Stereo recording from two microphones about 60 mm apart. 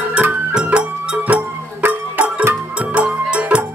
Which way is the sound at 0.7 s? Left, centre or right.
Right.